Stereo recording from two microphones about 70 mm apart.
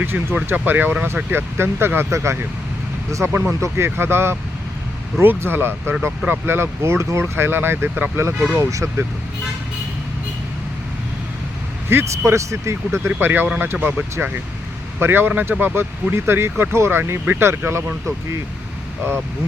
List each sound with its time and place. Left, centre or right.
0.0 s speech: right
3.6 s speech: right
11.9 s speech: right
13.1 s speech: right